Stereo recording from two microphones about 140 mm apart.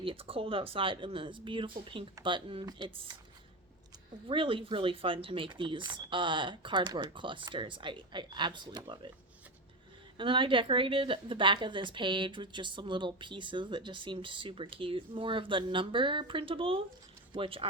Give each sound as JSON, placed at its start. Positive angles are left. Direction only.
{"t": 0.0, "sound": "a woman's voice", "side_deg": -40}
{"t": 4.3, "sound": "a woman's voice", "side_deg": -40}
{"t": 10.2, "sound": "a woman's voice", "side_deg": -35}